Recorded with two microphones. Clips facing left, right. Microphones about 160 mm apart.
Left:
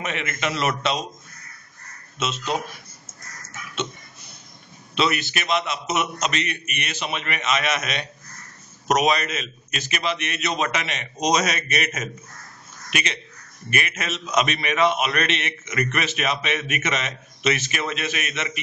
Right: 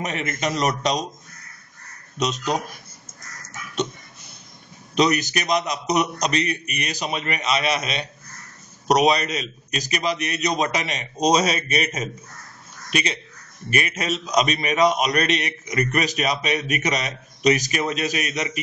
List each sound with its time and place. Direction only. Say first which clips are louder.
0.0 s a man's voice: right 2 dB; 40° right (ahead or behind)
2.1 s a man's voice: right 2 dB; 40° right (ahead or behind)
4.9 s a man's voice: right 4 dB; 40° right (ahead or behind)